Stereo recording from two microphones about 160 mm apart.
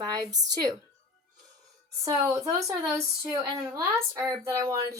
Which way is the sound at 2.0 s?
20° right (ahead or behind).